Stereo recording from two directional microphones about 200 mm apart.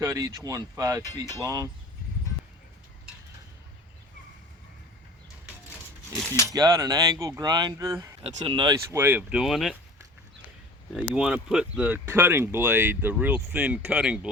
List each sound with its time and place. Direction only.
0.0 s speech: 15° right (ahead or behind)
6.1 s speech: 10° left (ahead or behind)
6.5 s speech: 15° right (ahead or behind)
8.2 s speech: 25° right (ahead or behind); by 9.7 s centre (ahead or behind)
11.1 s speech: 5° right (ahead or behind)